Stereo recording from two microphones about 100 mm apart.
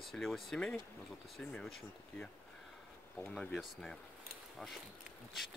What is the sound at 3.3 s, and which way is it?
Speech, 5° left (ahead or behind).